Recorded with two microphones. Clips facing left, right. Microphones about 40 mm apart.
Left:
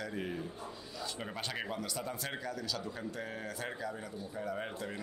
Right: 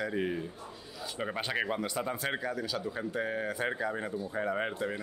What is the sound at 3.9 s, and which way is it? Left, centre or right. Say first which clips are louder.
Speech: right 8 dB; right.